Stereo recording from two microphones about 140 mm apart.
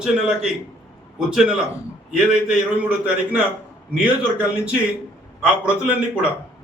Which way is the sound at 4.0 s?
10° right (ahead or behind).